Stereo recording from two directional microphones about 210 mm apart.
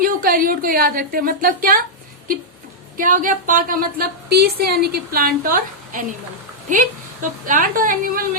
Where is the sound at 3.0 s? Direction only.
40° right (ahead or behind).